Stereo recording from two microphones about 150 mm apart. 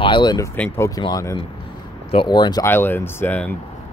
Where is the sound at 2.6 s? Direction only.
15° left (ahead or behind).